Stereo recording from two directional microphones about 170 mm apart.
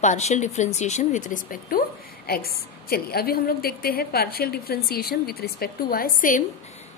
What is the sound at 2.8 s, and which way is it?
A woman's voice, 65° left (ahead or behind).